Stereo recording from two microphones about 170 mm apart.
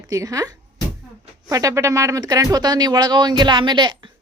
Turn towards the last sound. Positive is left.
turn(degrees=-25)  # may be behind; listen again after turning